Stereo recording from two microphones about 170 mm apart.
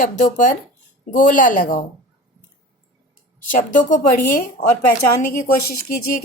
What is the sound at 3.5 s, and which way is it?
Speech, 50° left (ahead or behind).